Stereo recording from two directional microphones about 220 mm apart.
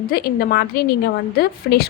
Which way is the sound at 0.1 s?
45° left (ahead or behind).